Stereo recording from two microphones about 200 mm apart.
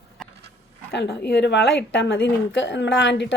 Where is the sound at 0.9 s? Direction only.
55° left (ahead or behind).